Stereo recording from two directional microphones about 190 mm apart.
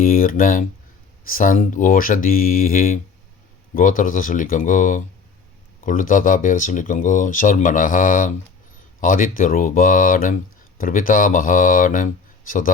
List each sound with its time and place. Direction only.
0.0 s speech: 50° left (ahead or behind)